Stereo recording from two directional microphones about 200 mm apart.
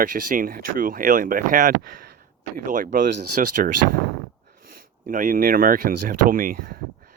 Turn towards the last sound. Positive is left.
turn(degrees=-45)  # may be behind; listen again after turning